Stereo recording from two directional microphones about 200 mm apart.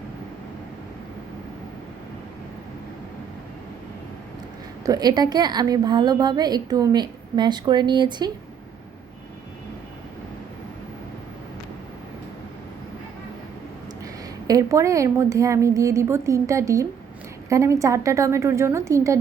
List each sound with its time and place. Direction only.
4.9 s a woman's voice: 20° right (ahead or behind)
14.0 s a woman's voice: 15° right (ahead or behind)